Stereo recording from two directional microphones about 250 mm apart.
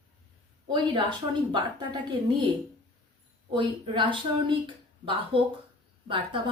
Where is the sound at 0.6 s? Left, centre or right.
Centre.